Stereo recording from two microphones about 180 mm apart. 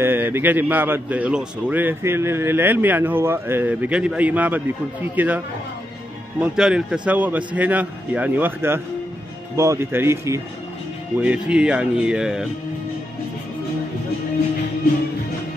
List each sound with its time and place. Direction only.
0.0 s a man's voice: 10° right (ahead or behind)
6.4 s a man's voice: 5° right (ahead or behind)